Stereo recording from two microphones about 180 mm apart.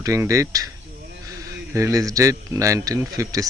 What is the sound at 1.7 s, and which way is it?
Speech, 15° right (ahead or behind).